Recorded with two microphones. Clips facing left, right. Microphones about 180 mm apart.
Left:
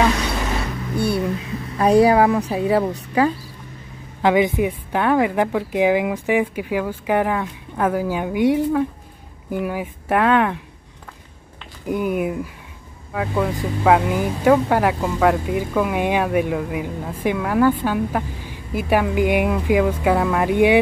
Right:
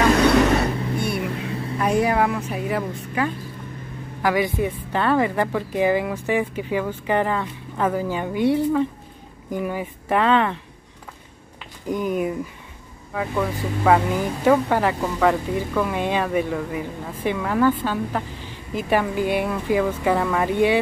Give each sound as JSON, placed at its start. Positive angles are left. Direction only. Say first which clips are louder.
{"t": 0.1, "sound": "vehicle", "louder": "right 8 dB", "side_deg": -65}
{"t": 0.9, "sound": "vehicle", "louder": "left 4 dB", "side_deg": 30}
{"t": 1.8, "sound": "speech", "louder": "left 6 dB", "side_deg": 35}
{"t": 4.2, "sound": "speech", "louder": "left 4 dB", "side_deg": 20}
{"t": 11.9, "sound": "speech", "louder": "left 2 dB", "side_deg": 10}